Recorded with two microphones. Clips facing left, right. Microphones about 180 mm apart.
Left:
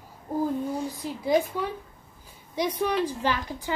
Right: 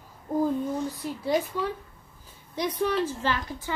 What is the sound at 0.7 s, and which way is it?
Speech, 10° left (ahead or behind).